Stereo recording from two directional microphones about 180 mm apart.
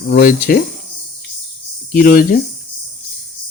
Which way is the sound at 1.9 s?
55° left (ahead or behind).